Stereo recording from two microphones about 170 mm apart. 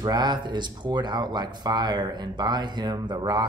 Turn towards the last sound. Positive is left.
turn(degrees=-25)  # may be behind; listen again after turning